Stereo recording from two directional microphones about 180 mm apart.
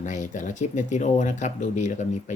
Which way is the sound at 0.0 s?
45° left (ahead or behind).